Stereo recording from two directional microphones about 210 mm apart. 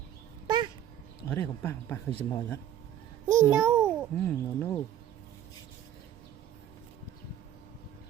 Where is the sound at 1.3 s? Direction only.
10° left (ahead or behind).